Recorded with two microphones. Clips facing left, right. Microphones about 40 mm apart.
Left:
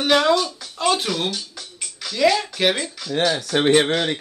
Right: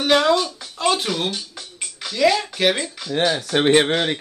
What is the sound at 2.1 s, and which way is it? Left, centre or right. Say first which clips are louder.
Speech: even; centre.